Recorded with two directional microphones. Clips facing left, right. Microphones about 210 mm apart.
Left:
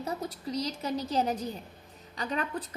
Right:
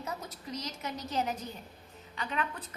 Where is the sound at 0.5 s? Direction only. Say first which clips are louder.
Left 6 dB; 35° left (ahead or behind).